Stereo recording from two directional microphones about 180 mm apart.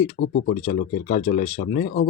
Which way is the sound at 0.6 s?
45° left (ahead or behind).